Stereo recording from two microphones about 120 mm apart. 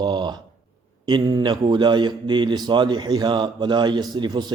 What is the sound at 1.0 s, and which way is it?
A man's voice, 35° right (ahead or behind).